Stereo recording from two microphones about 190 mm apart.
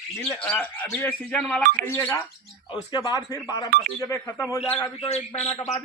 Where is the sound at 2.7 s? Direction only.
25° left (ahead or behind).